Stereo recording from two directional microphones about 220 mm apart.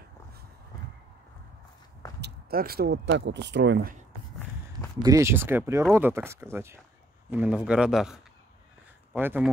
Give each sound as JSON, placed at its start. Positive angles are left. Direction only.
{"t": 2.2, "sound": "speech", "side_deg": -45}
{"t": 5.0, "sound": "a man's voice", "side_deg": -15}